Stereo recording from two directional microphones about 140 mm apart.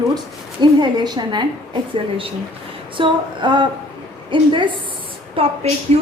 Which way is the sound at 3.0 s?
35° right (ahead or behind).